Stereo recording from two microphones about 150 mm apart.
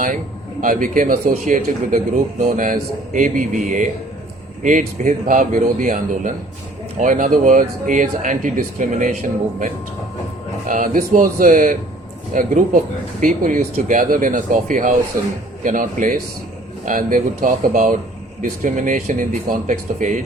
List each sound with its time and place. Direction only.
0.6 s speech: 65° right (ahead or behind)
10.7 s speech: 65° right (ahead or behind)